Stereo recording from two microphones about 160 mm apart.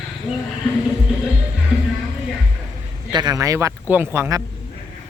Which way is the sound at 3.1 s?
25° right (ahead or behind).